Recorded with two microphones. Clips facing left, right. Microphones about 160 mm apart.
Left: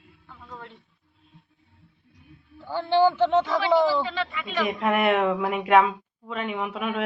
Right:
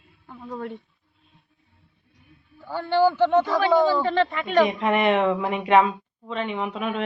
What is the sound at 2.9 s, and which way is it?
Speech, 15° left (ahead or behind).